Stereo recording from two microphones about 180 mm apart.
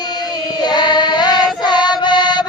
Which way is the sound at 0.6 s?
25° left (ahead or behind).